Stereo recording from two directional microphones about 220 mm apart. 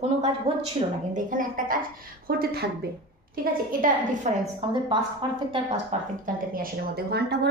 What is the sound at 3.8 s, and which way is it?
Speech, 35° right (ahead or behind).